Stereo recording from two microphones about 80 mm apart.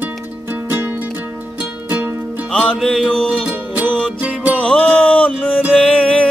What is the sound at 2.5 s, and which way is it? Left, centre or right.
Music, centre.